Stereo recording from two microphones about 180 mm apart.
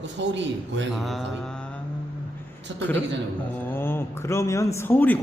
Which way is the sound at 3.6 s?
10° left (ahead or behind).